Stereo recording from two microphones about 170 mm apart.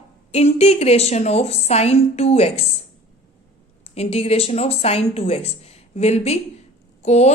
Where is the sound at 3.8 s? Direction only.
35° left (ahead or behind).